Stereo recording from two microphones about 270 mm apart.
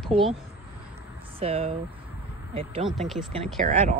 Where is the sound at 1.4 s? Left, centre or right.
Right.